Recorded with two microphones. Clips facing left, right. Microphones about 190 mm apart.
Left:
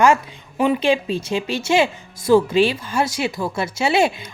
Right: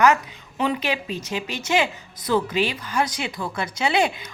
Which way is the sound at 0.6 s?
25° left (ahead or behind).